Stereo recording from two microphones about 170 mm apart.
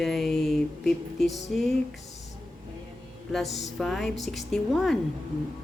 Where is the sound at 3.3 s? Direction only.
Centre (ahead or behind).